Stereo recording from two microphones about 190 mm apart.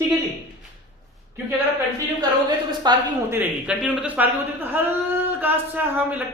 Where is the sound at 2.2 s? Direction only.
20° right (ahead or behind).